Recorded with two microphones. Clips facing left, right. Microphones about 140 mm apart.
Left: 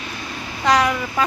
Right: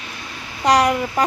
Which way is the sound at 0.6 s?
35° right (ahead or behind).